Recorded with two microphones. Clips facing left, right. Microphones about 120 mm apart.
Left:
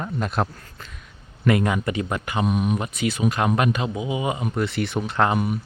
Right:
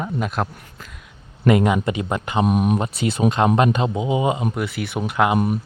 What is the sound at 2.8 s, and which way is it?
Speech, 30° right (ahead or behind).